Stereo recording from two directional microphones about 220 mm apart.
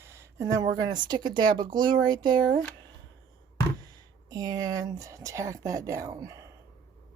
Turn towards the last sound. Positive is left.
turn(degrees=-15)  # may be behind; listen again after turning